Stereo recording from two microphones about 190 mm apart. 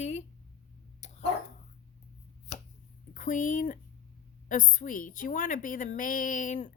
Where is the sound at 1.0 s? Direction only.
35° left (ahead or behind).